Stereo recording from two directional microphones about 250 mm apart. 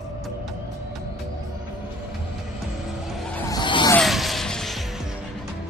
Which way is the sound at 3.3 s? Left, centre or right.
Centre.